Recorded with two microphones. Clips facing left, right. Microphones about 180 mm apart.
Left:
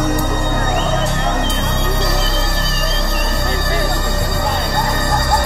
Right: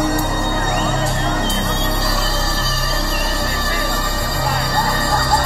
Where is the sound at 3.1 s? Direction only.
20° left (ahead or behind).